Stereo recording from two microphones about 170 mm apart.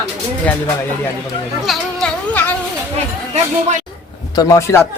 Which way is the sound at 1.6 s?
Centre (ahead or behind).